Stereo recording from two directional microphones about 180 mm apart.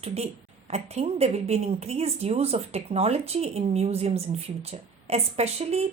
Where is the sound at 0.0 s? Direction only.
35° right (ahead or behind).